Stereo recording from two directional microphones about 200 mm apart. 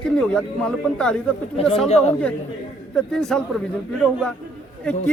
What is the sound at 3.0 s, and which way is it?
Speech, centre (ahead or behind).